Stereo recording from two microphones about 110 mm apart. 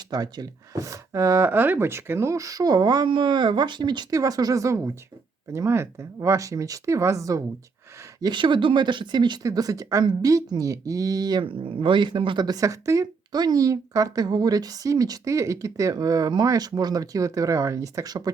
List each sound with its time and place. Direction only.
0.1 s speech: 35° right (ahead or behind)
8.2 s speech: 45° right (ahead or behind)